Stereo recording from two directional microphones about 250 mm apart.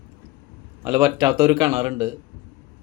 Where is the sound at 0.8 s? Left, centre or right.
Centre.